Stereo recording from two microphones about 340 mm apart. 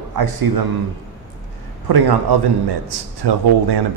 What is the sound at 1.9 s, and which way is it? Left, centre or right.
Speech, right.